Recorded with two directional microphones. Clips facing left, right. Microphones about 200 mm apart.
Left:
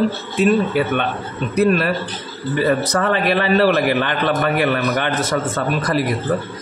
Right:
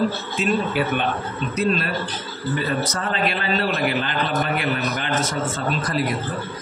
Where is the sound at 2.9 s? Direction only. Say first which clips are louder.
Left 7 dB; 70° left (ahead or behind).